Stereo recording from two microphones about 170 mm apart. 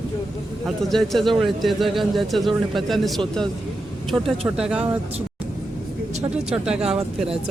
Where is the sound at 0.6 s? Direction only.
Centre (ahead or behind).